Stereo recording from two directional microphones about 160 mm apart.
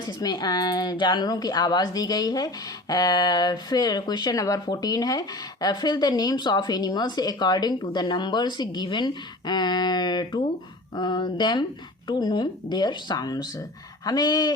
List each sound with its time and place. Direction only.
0.0 s speech: 25° left (ahead or behind)